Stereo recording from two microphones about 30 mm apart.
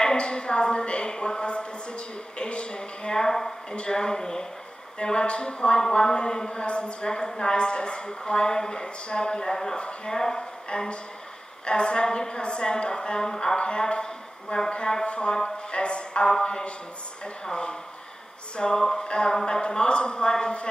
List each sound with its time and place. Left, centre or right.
0.2 s a sound: left; by 3.5 s centre
3.7 s a woman's voice: left
4.9 s a woman's voice: left
6.5 s a woman's voice: left
7.1 s a woman's voice: left
9.5 s a woman's voice: centre
10.7 s a woman's voice: left
13.6 s a woman's voice: left
18.8 s a woman's voice: centre
19.0 s a woman's voice: left